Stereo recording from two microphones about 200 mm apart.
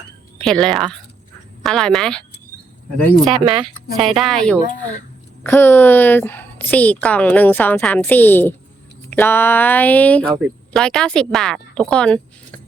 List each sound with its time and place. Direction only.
0.4 s a woman's voice: centre (ahead or behind)
3.4 s speech: 25° right (ahead or behind)
3.9 s a woman's voice: centre (ahead or behind)